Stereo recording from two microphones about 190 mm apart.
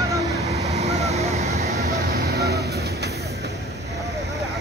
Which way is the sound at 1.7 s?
55° right (ahead or behind).